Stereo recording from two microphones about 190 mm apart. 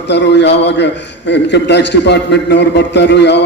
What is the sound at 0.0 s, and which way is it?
A man's voice, 65° left (ahead or behind).